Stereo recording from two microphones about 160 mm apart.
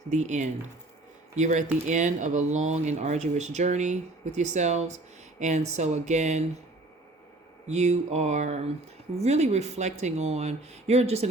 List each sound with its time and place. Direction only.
0.1 s speech: 50° right (ahead or behind)
7.7 s speech: 45° right (ahead or behind)